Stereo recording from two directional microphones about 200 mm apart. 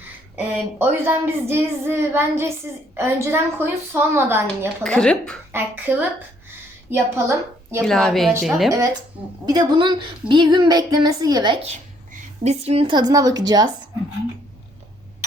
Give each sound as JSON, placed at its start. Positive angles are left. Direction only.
{"t": 0.3, "sound": "speech", "side_deg": -10}
{"t": 4.8, "sound": "speech", "side_deg": 5}
{"t": 5.5, "sound": "speech", "side_deg": -10}
{"t": 7.8, "sound": "speech", "side_deg": 0}
{"t": 9.5, "sound": "a woman's voice", "side_deg": -20}